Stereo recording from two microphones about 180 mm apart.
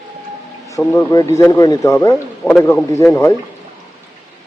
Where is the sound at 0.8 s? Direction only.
10° left (ahead or behind).